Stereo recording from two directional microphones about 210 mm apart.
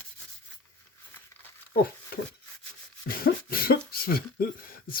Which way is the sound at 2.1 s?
45° left (ahead or behind).